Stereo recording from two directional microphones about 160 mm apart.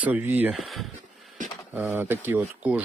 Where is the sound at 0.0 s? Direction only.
10° right (ahead or behind).